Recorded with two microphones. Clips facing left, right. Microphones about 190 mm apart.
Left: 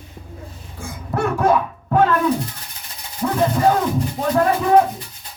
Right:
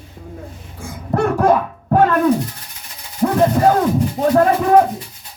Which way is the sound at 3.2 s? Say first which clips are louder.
Right 5 dB; 45° right (ahead or behind).